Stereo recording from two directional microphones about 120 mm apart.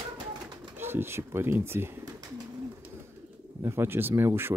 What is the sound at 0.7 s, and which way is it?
Speech, 20° right (ahead or behind).